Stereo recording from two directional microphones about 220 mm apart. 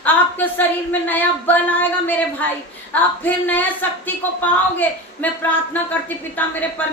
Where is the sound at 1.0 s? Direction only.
10° left (ahead or behind).